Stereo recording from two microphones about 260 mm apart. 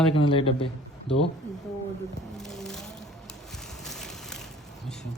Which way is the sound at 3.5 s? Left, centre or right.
Centre.